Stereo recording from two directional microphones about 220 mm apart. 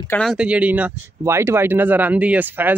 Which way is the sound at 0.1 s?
Centre (ahead or behind).